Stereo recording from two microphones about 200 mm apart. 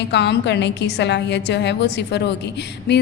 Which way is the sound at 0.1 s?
60° left (ahead or behind).